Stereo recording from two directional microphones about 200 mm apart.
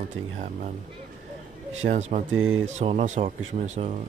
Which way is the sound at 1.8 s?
35° right (ahead or behind).